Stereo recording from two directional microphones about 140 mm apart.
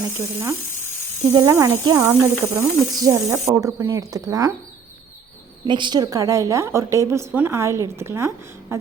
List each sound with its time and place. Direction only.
0.0 s a woman's voice: 20° right (ahead or behind)
5.6 s a woman's voice: 35° right (ahead or behind)